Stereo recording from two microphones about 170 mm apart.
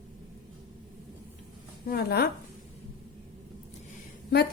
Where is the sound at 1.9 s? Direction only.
70° left (ahead or behind).